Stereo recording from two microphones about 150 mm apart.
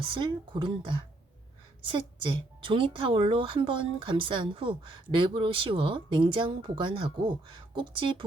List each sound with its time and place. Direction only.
0.1 s a woman's voice: 30° right (ahead or behind)